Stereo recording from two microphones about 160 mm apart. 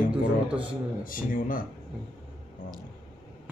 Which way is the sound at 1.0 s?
60° left (ahead or behind).